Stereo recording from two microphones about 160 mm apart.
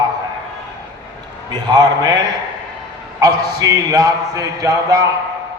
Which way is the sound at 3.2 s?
25° right (ahead or behind).